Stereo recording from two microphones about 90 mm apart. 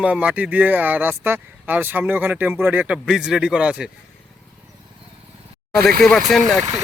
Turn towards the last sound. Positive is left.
turn(degrees=0)  # may be behind; listen again after turning